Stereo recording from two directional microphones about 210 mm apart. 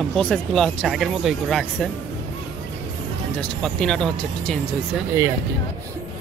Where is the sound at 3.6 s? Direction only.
5° left (ahead or behind).